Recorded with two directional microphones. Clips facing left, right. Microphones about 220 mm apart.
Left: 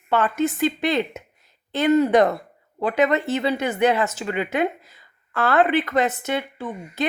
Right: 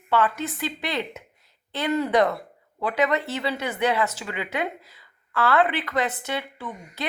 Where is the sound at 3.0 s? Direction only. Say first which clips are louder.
Left 4 dB; 45° left (ahead or behind).